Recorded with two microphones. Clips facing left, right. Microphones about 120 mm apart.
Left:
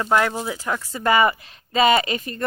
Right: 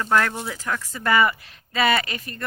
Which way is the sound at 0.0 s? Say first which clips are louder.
Left 2 dB; 15° left (ahead or behind).